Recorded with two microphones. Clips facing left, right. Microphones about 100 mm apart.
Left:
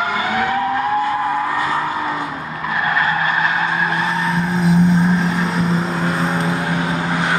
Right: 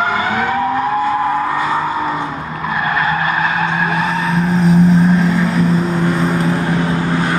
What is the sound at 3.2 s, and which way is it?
Vehicle, 5° right (ahead or behind).